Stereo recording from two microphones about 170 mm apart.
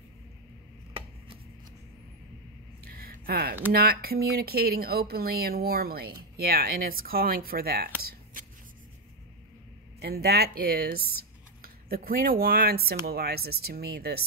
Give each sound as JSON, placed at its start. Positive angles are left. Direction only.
{"t": 2.9, "sound": "a sound", "side_deg": -60}
{"t": 3.7, "sound": "speech", "side_deg": -65}
{"t": 9.9, "sound": "speech", "side_deg": -70}